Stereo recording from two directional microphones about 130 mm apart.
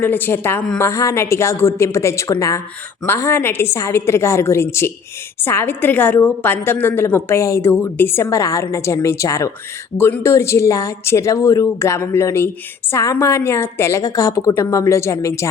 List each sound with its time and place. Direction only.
0.0 s a woman's voice: 15° left (ahead or behind)